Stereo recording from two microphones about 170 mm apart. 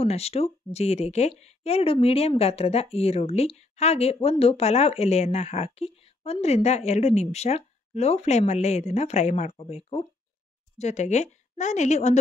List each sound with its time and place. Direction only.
0.0 s a woman's voice: 35° left (ahead or behind)